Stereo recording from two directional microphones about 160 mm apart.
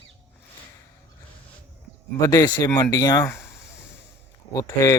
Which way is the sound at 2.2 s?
20° left (ahead or behind).